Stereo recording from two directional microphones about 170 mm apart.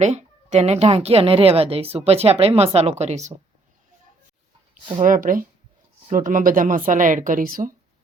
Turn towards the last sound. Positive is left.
turn(degrees=-55)  # may be behind; listen again after turning